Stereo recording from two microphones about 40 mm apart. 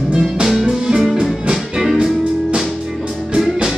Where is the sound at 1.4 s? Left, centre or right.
Centre.